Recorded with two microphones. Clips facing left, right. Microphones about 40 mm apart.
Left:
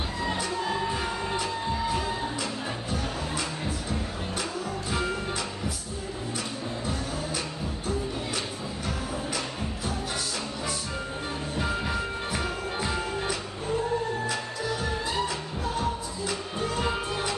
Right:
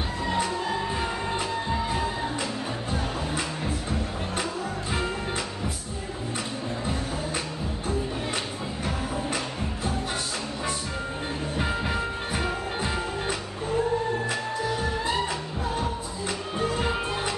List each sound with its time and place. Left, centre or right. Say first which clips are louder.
0.9 s music: right 1 dB; right
11.5 s music: right 1 dB; right